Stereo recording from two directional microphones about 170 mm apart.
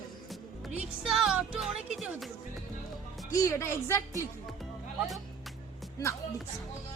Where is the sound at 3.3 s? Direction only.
20° left (ahead or behind).